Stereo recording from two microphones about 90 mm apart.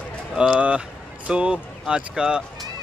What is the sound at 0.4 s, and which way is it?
A man's voice, 10° right (ahead or behind).